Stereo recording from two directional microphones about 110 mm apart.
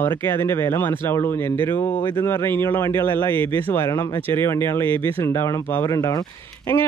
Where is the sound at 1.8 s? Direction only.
45° left (ahead or behind).